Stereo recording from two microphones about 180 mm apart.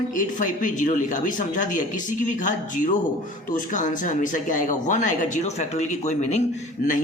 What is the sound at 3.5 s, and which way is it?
A man's voice, 45° left (ahead or behind).